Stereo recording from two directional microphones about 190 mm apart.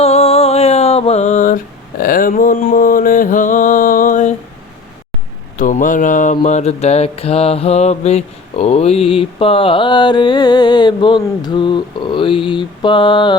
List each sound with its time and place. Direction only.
0.0 s mantra: 30° left (ahead or behind)
5.5 s mantra: 45° left (ahead or behind); by 13.3 s 25° left (ahead or behind)